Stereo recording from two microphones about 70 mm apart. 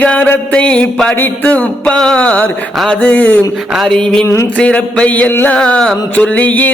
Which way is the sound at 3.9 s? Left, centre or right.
Centre.